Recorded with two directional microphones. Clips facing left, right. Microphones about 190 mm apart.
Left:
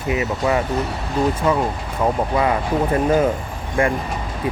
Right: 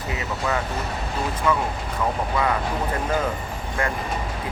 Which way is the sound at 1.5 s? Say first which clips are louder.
Left 2 dB; 30° left (ahead or behind).